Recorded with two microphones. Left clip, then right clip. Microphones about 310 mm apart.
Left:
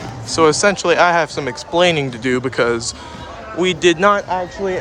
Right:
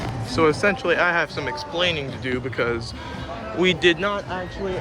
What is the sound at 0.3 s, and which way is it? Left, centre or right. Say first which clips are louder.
Speech: left 6 dB; centre.